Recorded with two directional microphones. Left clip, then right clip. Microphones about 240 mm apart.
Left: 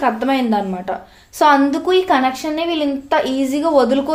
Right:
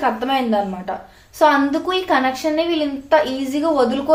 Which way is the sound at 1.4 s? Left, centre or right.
Left.